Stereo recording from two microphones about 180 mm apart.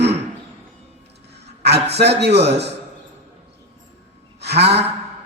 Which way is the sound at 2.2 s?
70° right (ahead or behind).